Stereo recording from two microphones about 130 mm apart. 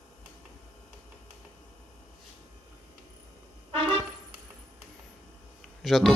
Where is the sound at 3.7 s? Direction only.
40° right (ahead or behind).